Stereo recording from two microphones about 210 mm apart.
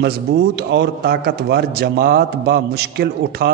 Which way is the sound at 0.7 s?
50° right (ahead or behind).